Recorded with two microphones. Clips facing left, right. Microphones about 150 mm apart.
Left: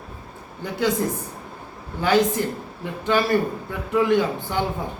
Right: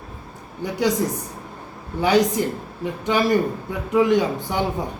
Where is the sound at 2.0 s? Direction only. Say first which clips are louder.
Right 1 dB; 15° right (ahead or behind).